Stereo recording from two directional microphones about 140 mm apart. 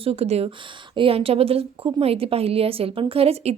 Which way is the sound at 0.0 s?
45° right (ahead or behind).